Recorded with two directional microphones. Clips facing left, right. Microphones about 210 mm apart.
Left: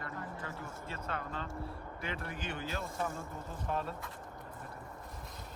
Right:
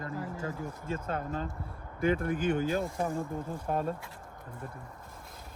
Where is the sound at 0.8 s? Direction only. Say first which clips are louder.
Right 7 dB; 50° right (ahead or behind).